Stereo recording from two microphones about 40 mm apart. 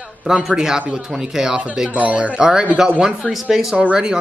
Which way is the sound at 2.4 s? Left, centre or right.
Centre.